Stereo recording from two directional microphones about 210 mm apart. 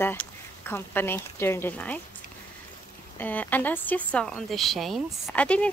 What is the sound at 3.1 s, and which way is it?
Speech, 10° left (ahead or behind).